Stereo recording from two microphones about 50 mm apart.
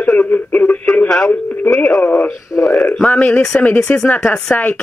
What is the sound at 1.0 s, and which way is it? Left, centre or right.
Speech, centre.